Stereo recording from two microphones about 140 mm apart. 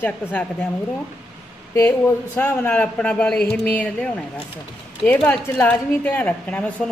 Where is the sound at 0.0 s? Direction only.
10° left (ahead or behind).